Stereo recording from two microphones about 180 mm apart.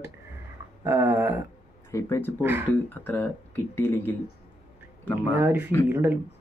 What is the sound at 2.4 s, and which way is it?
Speech, 10° right (ahead or behind).